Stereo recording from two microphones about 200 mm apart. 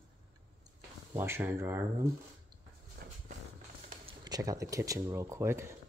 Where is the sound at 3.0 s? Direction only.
50° right (ahead or behind).